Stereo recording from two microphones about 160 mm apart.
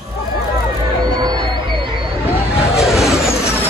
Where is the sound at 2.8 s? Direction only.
Centre (ahead or behind).